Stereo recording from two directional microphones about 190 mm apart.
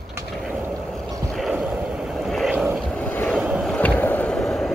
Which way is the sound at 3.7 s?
10° left (ahead or behind).